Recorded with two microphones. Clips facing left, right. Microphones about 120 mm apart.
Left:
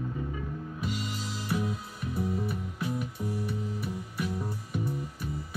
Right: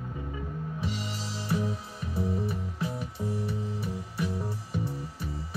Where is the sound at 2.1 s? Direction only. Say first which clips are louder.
Right 1 dB; 25° right (ahead or behind).